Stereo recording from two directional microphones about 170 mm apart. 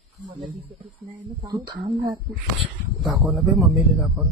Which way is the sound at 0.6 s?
30° right (ahead or behind).